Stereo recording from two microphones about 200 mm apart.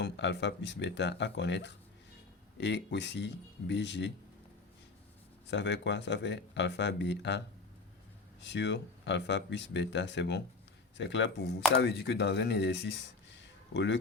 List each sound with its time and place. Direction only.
0.0 s speech: 60° left (ahead or behind)
5.5 s speech: 60° left (ahead or behind)
8.4 s speech: 60° left (ahead or behind)
13.4 s a sound: 60° left (ahead or behind)